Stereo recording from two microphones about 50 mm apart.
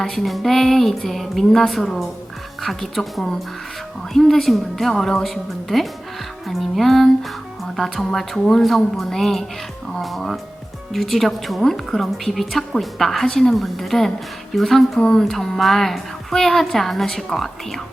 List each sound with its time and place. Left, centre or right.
0.0 s a woman's voice: centre
14.9 s a woman's voice: centre